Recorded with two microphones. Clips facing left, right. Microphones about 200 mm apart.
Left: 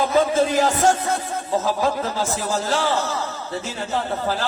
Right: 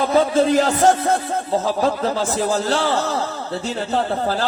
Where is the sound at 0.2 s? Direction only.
55° right (ahead or behind).